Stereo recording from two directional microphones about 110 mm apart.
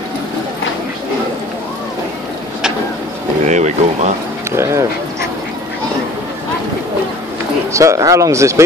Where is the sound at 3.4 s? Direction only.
90° right.